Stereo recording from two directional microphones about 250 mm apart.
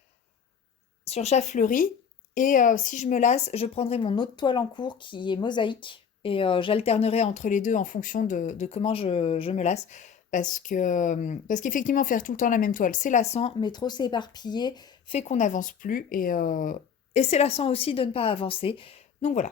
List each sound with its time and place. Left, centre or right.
1.0 s speech: left